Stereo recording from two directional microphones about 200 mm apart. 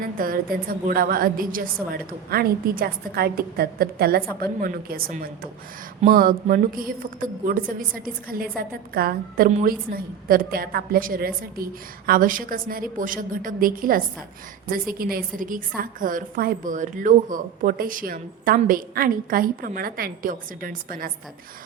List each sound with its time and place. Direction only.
0.0 s a woman's voice: 45° right (ahead or behind)